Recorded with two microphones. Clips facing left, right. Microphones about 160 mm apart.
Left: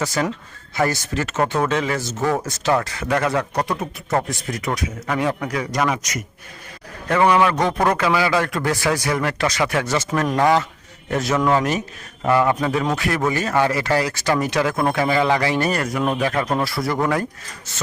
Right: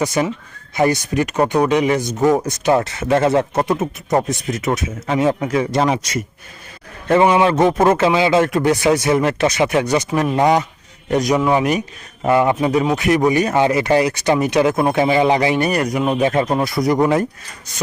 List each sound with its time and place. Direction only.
0.0 s speech: 20° right (ahead or behind)